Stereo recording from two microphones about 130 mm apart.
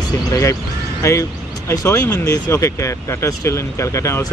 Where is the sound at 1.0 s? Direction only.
25° left (ahead or behind).